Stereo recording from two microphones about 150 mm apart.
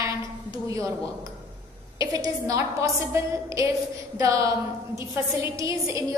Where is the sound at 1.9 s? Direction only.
20° right (ahead or behind).